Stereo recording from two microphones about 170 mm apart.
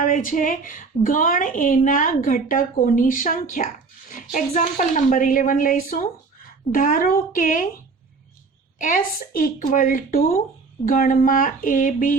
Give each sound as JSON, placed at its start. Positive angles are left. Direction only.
{"t": 0.0, "sound": "a woman's voice", "side_deg": 50}
{"t": 8.8, "sound": "a woman's voice", "side_deg": 50}